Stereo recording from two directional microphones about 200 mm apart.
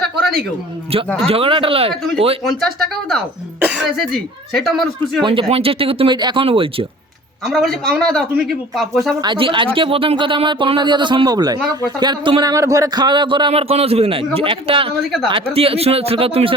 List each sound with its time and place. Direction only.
1.3 s a man's voice: 30° right (ahead or behind)
2.4 s speech: centre (ahead or behind)
5.2 s a man's voice: 25° right (ahead or behind)
7.4 s speech: centre (ahead or behind)
9.2 s a man's voice: 25° right (ahead or behind)